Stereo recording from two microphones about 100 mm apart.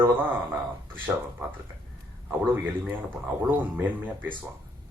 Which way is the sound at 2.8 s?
20° right (ahead or behind).